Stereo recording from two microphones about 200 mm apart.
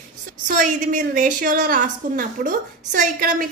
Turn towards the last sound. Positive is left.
turn(degrees=-40)  # may be behind; listen again after turning